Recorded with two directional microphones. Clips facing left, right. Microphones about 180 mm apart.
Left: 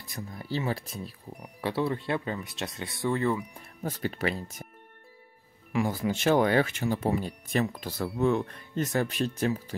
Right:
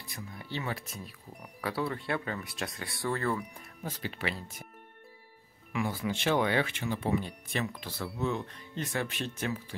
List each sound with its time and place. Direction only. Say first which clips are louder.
0.1 s speech: left 6 dB; 40° left (ahead or behind); by 3.3 s 20° left (ahead or behind)
3.8 s speech: left 6 dB; 45° left (ahead or behind)
5.7 s speech: left 5 dB; 40° left (ahead or behind)